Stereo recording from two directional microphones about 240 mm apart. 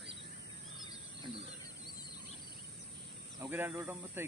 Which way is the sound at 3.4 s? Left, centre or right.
Centre.